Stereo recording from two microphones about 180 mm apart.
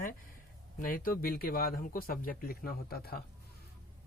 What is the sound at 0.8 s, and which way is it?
Speech, 50° left (ahead or behind).